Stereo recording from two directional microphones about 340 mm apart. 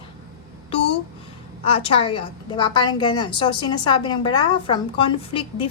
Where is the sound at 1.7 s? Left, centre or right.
Centre.